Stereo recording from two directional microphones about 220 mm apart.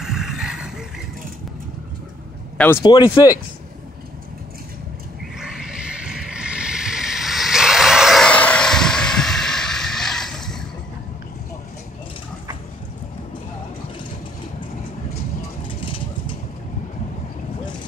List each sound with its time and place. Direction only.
0.0 s vehicle: centre (ahead or behind)
2.5 s speech: 10° left (ahead or behind)
2.8 s speech: 20° left (ahead or behind)
5.4 s a sound: 5° right (ahead or behind)
15.8 s vehicle: 25° left (ahead or behind)